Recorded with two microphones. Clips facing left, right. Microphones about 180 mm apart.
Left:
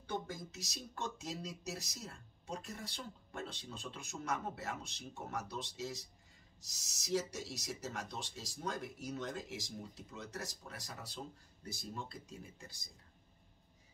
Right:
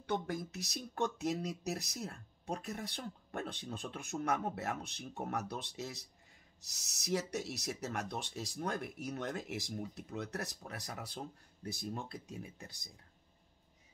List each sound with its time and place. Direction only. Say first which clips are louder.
0.0 s speech: right 5 dB; 70° right (ahead or behind)